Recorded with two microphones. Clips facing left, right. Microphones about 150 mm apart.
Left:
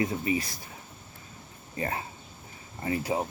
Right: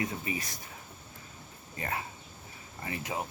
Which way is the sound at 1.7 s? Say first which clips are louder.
Left 4 dB; 30° left (ahead or behind).